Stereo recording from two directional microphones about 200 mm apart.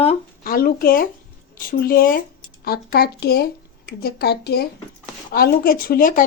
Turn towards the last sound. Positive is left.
turn(degrees=45)  # may be behind; listen again after turning